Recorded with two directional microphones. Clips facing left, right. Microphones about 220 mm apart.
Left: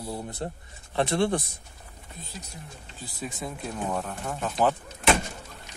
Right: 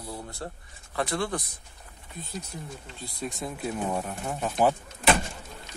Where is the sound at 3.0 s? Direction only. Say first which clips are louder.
Right 1 dB; centre (ahead or behind).